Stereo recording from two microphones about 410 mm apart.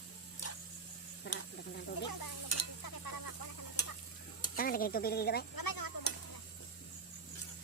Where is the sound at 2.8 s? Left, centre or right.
Left.